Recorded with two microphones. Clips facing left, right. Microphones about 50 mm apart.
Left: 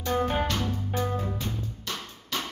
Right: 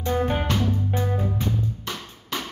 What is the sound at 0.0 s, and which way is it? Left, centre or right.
Music, centre.